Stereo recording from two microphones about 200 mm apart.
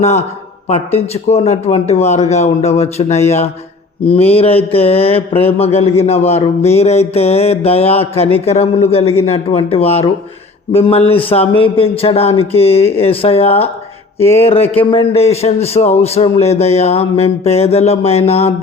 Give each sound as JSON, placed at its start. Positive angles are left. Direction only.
{"t": 0.0, "sound": "a man's voice", "side_deg": 35}